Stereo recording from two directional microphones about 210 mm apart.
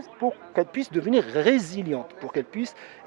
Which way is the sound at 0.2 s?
25° right (ahead or behind).